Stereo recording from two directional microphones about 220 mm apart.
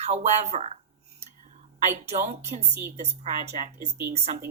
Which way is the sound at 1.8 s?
30° right (ahead or behind).